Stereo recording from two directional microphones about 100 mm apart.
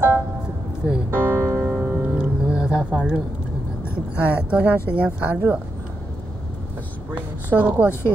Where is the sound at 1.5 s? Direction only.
5° left (ahead or behind).